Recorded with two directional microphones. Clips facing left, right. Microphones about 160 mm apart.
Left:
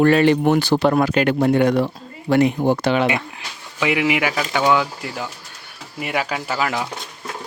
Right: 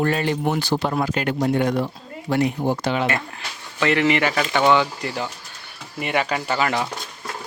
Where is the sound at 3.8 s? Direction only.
10° left (ahead or behind).